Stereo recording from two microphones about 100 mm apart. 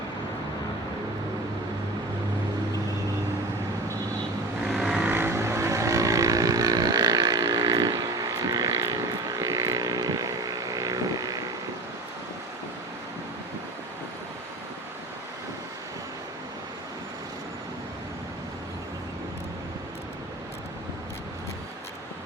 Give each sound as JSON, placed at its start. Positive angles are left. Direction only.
{"t": 4.6, "sound": "vehicle", "side_deg": -5}
{"t": 5.0, "sound": "vehicle", "side_deg": -25}